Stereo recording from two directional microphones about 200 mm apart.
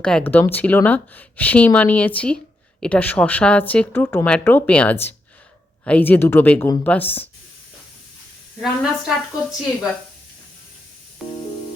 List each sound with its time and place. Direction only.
0.0 s speech: 5° left (ahead or behind)
8.6 s a woman's voice: centre (ahead or behind)
11.2 s music: centre (ahead or behind)